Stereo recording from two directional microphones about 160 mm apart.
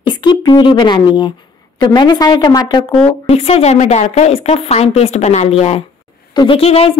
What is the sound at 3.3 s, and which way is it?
A woman's voice, 40° left (ahead or behind).